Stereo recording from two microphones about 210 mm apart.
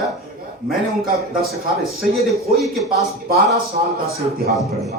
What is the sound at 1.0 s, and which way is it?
Speech, 45° right (ahead or behind).